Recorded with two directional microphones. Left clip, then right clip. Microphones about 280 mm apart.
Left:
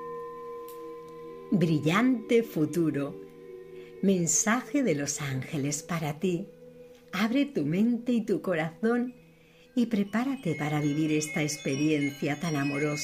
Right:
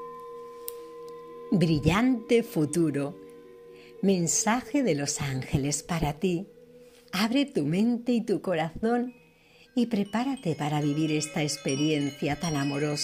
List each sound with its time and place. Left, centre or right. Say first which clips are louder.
1.5 s a woman's voice: right 1 dB; centre